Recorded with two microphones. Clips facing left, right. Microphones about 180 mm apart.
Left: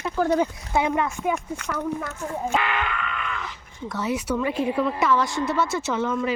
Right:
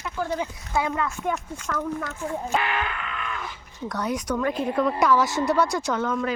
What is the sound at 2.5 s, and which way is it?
Speech, 35° right (ahead or behind).